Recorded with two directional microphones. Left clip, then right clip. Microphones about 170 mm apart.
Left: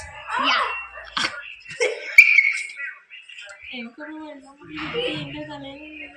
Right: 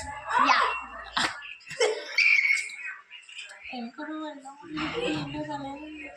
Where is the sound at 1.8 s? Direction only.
10° right (ahead or behind).